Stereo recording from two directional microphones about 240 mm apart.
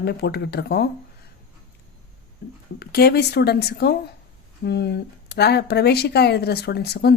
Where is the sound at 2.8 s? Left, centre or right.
Left.